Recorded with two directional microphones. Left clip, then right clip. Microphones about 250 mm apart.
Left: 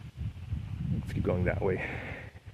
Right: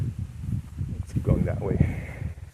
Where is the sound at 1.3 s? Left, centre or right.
Centre.